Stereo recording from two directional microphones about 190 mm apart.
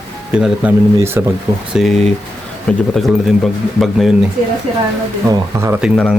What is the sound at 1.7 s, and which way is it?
Speech, centre (ahead or behind).